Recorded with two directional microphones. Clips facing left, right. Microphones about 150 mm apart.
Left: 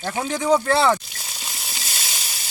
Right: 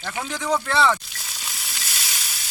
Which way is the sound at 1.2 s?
40° left (ahead or behind).